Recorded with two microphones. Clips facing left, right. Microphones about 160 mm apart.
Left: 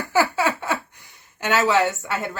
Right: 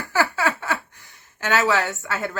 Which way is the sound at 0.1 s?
15° left (ahead or behind).